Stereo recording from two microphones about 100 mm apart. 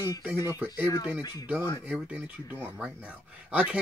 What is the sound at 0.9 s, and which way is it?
Speech, 45° left (ahead or behind).